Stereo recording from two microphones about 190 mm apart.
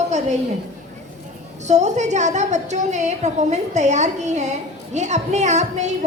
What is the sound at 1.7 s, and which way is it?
A woman's voice, 35° right (ahead or behind).